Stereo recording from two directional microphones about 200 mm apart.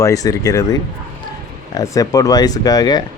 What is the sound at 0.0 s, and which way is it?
Speech, 15° left (ahead or behind).